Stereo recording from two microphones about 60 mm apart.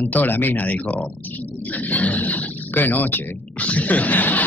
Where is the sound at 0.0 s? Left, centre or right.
Left.